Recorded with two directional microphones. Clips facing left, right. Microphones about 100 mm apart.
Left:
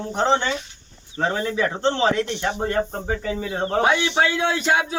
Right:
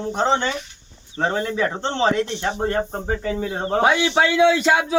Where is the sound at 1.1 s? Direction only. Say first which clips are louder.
Right 1 dB; 25° right (ahead or behind).